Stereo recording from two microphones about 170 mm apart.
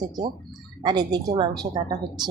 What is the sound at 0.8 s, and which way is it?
Speech, 25° right (ahead or behind).